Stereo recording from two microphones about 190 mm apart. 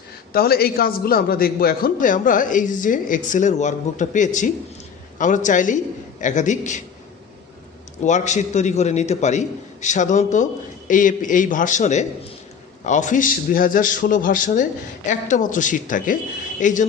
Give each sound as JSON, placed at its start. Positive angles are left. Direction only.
{"t": 0.3, "sound": "a man's voice", "side_deg": 55}
{"t": 8.0, "sound": "a man's voice", "side_deg": 40}